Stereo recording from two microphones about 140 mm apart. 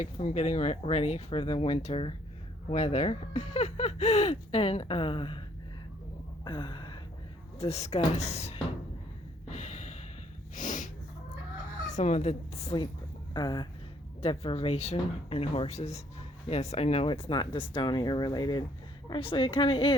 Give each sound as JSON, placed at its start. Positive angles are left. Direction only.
{"t": 0.0, "sound": "speech", "side_deg": 55}
{"t": 2.6, "sound": "speech", "side_deg": 55}
{"t": 6.4, "sound": "a sound", "side_deg": 35}
{"t": 7.6, "sound": "speech", "side_deg": 50}
{"t": 9.5, "sound": "music", "side_deg": 55}
{"t": 10.5, "sound": "snort", "side_deg": 65}
{"t": 11.9, "sound": "speech", "side_deg": 55}
{"t": 13.3, "sound": "speech", "side_deg": 30}
{"t": 14.2, "sound": "speech", "side_deg": 40}